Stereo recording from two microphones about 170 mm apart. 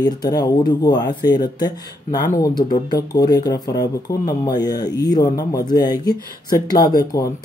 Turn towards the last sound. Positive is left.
turn(degrees=20)  # may be behind; listen again after turning